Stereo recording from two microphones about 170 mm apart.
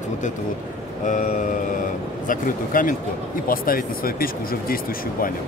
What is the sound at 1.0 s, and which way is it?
Speech, 50° left (ahead or behind).